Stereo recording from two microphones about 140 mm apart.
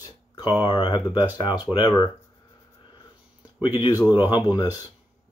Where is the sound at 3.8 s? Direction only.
25° left (ahead or behind).